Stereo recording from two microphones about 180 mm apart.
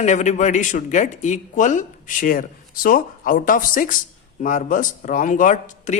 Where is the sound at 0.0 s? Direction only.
40° left (ahead or behind).